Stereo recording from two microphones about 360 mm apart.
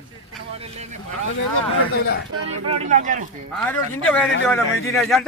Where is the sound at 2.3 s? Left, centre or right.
Right.